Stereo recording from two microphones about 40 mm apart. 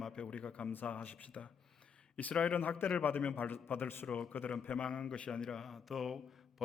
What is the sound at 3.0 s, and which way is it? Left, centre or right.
A man's voice, left.